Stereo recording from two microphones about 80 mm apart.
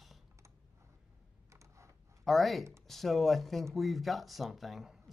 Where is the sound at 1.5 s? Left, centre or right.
Right.